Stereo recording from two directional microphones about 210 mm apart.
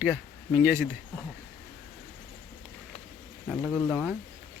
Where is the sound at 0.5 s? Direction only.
10° right (ahead or behind).